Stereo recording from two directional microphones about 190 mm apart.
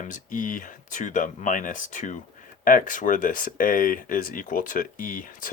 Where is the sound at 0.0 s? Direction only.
45° left (ahead or behind).